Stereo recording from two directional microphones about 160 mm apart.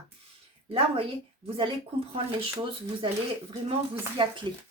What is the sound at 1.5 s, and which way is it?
Speech, 35° right (ahead or behind).